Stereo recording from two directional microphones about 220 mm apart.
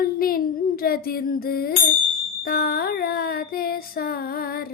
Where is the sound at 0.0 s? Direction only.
40° left (ahead or behind).